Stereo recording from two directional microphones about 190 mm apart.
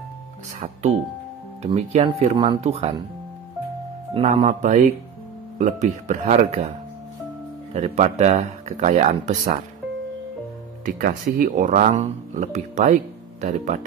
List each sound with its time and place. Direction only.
1.6 s speech: 35° right (ahead or behind)
2.3 s speech: 25° right (ahead or behind)
4.1 s speech: 35° right (ahead or behind)
7.7 s speech: 35° right (ahead or behind)
10.9 s speech: 50° right (ahead or behind)